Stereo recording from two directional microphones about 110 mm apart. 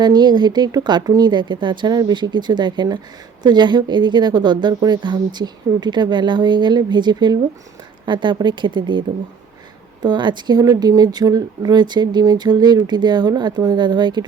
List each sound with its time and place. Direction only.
0.0 s speech: 40° right (ahead or behind)